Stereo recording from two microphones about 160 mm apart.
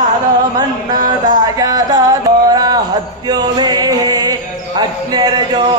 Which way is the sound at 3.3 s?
25° right (ahead or behind).